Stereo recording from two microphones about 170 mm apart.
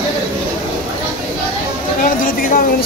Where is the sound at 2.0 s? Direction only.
55° left (ahead or behind).